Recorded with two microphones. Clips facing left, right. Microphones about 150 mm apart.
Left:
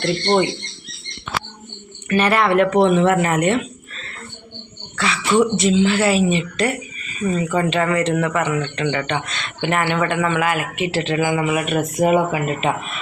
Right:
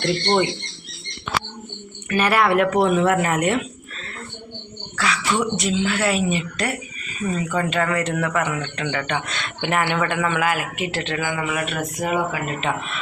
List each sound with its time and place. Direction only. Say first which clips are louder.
2.0 s a man's voice: left 2 dB; 5° right (ahead or behind)
4.9 s a sound: left 4 dB; centre (ahead or behind)
5.5 s a man's voice: left 6 dB; centre (ahead or behind)